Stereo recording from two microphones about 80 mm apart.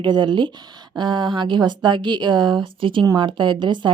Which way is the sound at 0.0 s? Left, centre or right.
Right.